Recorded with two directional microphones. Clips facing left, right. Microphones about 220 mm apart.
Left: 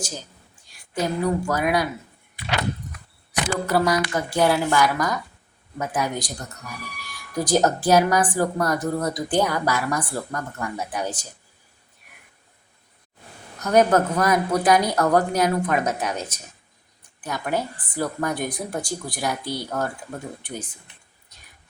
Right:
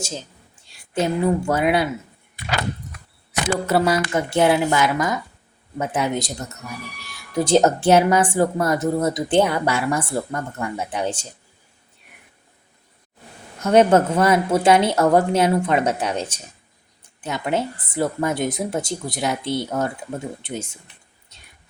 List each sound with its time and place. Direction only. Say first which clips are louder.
0.0 s a woman's voice: right 3 dB; 25° right (ahead or behind)
3.7 s speech: right 2 dB; 25° right (ahead or behind)
13.6 s speech: right 3 dB; 25° right (ahead or behind)